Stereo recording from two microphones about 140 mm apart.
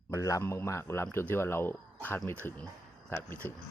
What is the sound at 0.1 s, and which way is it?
Speech, 25° left (ahead or behind).